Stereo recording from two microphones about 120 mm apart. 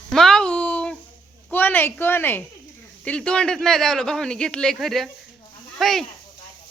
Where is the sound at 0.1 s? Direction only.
5° left (ahead or behind).